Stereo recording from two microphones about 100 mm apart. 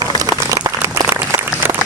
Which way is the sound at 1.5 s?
20° left (ahead or behind).